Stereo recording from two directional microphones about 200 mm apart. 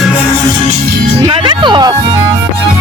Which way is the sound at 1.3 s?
25° right (ahead or behind).